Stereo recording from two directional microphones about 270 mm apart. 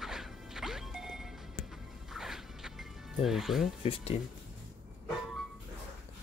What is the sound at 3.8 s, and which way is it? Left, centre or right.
Speech, left.